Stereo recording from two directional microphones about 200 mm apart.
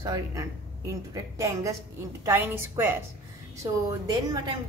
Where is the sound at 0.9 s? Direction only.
15° right (ahead or behind).